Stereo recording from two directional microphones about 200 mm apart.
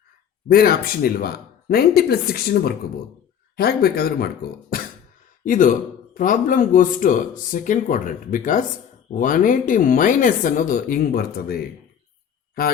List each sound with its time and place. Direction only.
0.4 s speech: 50° left (ahead or behind)
5.5 s speech: 40° left (ahead or behind)